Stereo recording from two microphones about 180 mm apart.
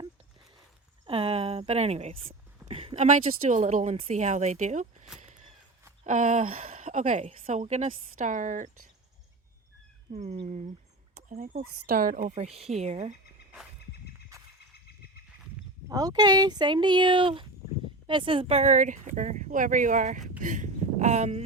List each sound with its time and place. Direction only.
1.0 s speech: 30° right (ahead or behind)
5.2 s a sound: 40° right (ahead or behind)
6.1 s a woman's voice: 45° right (ahead or behind)
10.1 s speech: 35° right (ahead or behind)
14.3 s a sound: 20° right (ahead or behind)
15.9 s a woman's voice: 20° right (ahead or behind); by 21.4 s 40° right (ahead or behind)